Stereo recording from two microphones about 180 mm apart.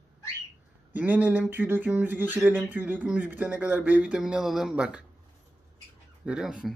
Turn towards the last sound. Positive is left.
turn(degrees=-5)  # may be behind; listen again after turning